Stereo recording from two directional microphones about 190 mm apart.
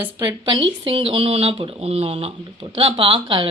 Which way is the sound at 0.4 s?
25° right (ahead or behind).